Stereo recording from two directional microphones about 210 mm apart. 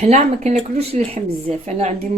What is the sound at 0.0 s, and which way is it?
Speech, 35° right (ahead or behind).